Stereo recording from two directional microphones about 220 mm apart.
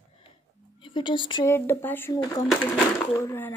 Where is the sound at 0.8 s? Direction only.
20° left (ahead or behind).